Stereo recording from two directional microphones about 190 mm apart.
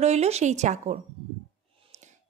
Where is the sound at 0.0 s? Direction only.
35° right (ahead or behind).